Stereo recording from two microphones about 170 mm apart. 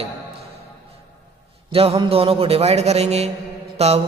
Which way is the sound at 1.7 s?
35° right (ahead or behind).